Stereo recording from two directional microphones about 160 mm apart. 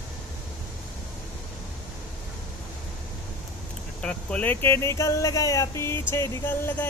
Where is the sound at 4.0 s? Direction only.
5° left (ahead or behind).